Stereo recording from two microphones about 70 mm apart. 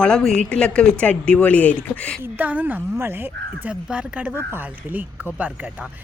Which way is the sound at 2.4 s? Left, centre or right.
Right.